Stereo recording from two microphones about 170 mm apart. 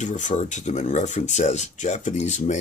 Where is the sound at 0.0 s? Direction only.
45° left (ahead or behind).